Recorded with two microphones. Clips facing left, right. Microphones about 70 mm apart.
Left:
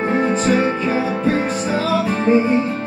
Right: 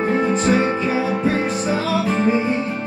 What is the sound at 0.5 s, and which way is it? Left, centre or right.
Music, left.